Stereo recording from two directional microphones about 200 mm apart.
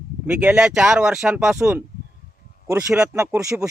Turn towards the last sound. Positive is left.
turn(degrees=-15)  # may be behind; listen again after turning